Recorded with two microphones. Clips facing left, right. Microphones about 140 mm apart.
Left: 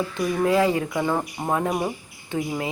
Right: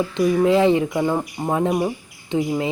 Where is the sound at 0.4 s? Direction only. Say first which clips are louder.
Right 2 dB; 25° right (ahead or behind).